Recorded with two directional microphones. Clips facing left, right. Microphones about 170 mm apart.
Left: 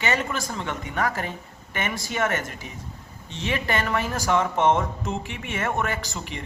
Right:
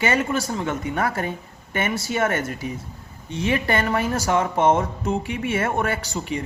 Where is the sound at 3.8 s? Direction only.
30° right (ahead or behind).